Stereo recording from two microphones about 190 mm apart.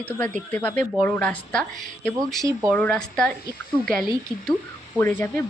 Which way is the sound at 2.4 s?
15° right (ahead or behind).